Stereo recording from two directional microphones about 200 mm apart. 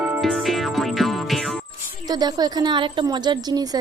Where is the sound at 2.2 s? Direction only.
20° right (ahead or behind).